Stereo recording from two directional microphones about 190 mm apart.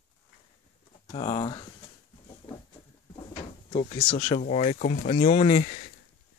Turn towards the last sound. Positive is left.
turn(degrees=35)  # may be behind; listen again after turning